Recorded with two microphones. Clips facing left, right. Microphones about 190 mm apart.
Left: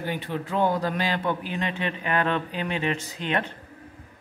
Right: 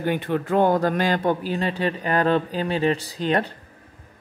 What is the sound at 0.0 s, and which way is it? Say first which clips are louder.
Speech: right 6 dB; 55° right (ahead or behind).